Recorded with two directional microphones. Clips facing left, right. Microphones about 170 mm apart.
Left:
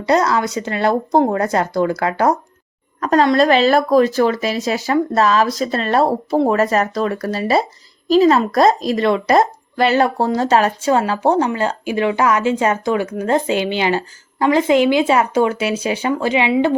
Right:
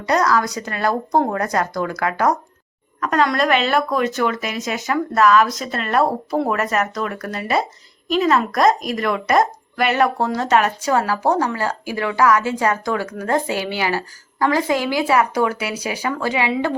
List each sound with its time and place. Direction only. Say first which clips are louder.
0.0 s speech: left 2 dB; 25° left (ahead or behind)